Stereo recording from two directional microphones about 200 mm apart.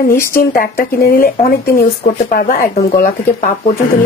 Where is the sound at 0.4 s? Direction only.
45° left (ahead or behind).